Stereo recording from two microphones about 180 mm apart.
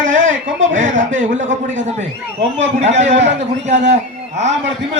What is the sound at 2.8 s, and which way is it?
Speech, 40° right (ahead or behind).